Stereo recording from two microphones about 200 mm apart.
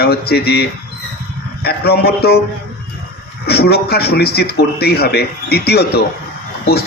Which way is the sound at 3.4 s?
50° left (ahead or behind).